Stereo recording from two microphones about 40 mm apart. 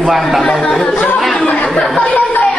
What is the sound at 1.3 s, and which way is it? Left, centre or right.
Speech, left.